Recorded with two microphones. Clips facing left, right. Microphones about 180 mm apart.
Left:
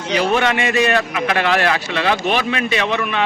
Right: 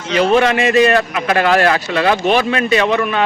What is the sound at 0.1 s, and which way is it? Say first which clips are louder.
A man's voice: right 4 dB; 35° right (ahead or behind).